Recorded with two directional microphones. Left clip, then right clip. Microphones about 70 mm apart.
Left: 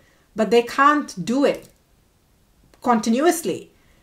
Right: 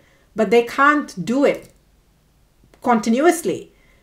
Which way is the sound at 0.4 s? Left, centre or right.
Left.